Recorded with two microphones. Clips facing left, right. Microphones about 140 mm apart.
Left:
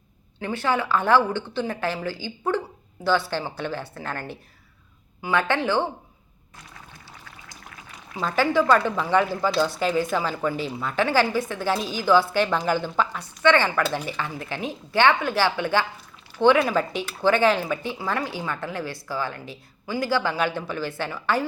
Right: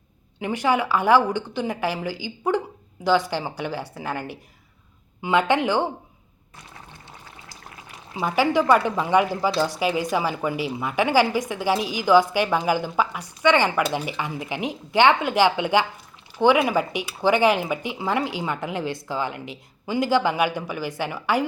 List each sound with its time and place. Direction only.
0.3 s speech: 15° right (ahead or behind)
8.2 s speech: 15° right (ahead or behind)